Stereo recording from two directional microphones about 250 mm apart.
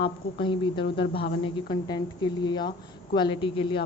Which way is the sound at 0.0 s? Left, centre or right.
Centre.